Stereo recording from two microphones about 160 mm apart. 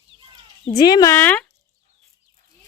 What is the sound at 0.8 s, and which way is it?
Speech, 25° left (ahead or behind).